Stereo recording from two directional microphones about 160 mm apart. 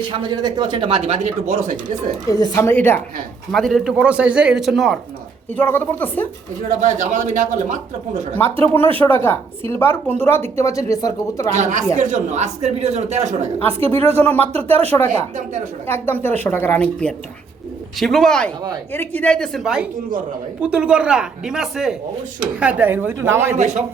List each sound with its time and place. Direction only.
0.1 s speech: 30° right (ahead or behind)
1.5 s a man's voice: 55° right (ahead or behind)
2.4 s a woman's voice: 20° left (ahead or behind)
3.5 s a man's voice: centre (ahead or behind)
5.5 s a woman's voice: 10° left (ahead or behind)
6.7 s a man's voice: 50° right (ahead or behind)
8.6 s a woman's voice: 10° left (ahead or behind)
11.5 s a man's voice: 50° right (ahead or behind)
14.1 s a woman's voice: 10° left (ahead or behind); by 23.6 s 15° right (ahead or behind)
23.6 s a man's voice: 45° right (ahead or behind)